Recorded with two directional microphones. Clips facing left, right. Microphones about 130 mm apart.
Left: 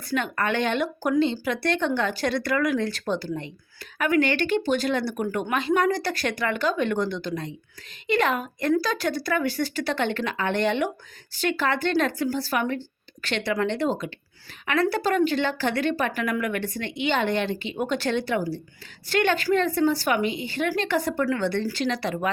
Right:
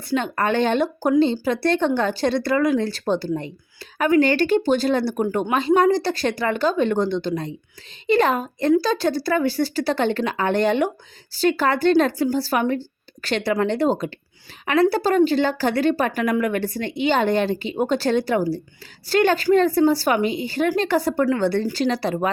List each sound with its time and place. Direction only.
0.1 s a woman's voice: 30° right (ahead or behind)